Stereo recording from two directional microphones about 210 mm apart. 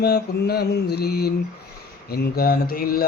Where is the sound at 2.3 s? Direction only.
45° left (ahead or behind).